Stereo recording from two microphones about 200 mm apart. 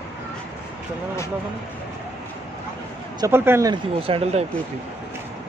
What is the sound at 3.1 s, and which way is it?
Speech, 15° right (ahead or behind).